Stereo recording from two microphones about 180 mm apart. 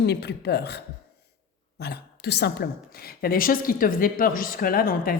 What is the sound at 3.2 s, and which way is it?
A woman's voice, 55° left (ahead or behind).